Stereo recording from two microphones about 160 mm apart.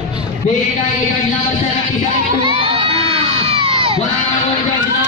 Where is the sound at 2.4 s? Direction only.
35° right (ahead or behind).